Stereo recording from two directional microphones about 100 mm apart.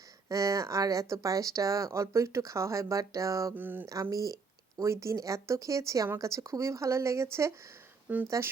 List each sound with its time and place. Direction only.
0.3 s speech: 35° right (ahead or behind)
3.5 s speech: 20° right (ahead or behind)
4.1 s speech: 35° right (ahead or behind)
8.0 s speech: 15° right (ahead or behind)